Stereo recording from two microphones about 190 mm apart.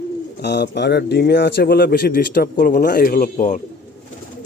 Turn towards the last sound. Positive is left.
turn(degrees=45)  # may be behind; listen again after turning